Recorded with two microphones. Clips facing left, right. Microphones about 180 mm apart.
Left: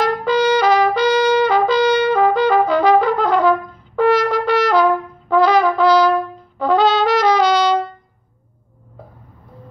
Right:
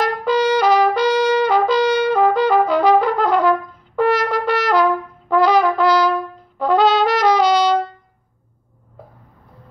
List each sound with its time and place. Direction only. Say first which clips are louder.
0.0 s trumpet: left 1 dB; 5° right (ahead or behind)
5.3 s brass instrument: left 1 dB; 5° right (ahead or behind)
6.6 s trumpet: even; 5° right (ahead or behind)